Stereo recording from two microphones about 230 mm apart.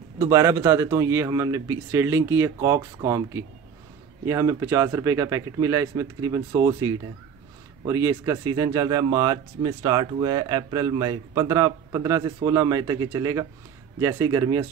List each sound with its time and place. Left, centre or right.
0.2 s speech: centre